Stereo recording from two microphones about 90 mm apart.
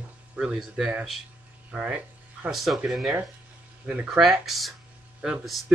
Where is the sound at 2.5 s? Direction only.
Centre (ahead or behind).